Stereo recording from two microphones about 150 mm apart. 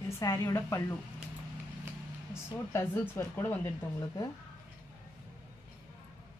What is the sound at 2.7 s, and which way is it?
Speech, 20° left (ahead or behind).